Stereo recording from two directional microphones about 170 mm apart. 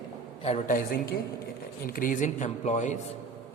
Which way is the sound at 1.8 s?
55° left (ahead or behind).